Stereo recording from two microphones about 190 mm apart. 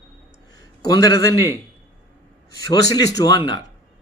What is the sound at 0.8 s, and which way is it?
Speech, 20° left (ahead or behind).